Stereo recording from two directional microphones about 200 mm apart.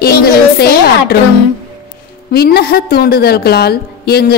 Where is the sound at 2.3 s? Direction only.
50° left (ahead or behind).